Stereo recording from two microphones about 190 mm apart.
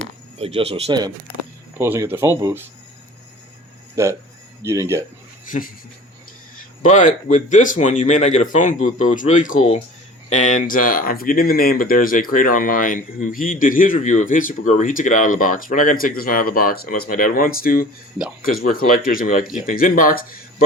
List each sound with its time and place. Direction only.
0.3 s speech: 30° right (ahead or behind)
1.8 s speech: 10° right (ahead or behind)
4.0 s speech: 15° right (ahead or behind)
6.8 s speech: 40° left (ahead or behind)